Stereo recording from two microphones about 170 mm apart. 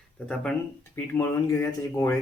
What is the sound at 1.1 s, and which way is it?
Speech, 15° left (ahead or behind).